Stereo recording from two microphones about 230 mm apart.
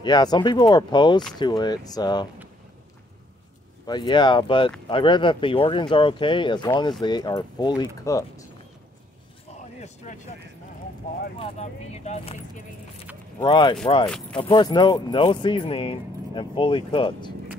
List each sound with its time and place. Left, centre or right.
0.0 s speech: centre
3.8 s speech: centre
9.5 s a sound: left
11.3 s speech: left
13.4 s speech: centre